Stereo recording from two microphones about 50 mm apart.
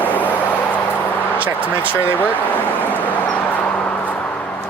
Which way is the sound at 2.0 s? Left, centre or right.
Left.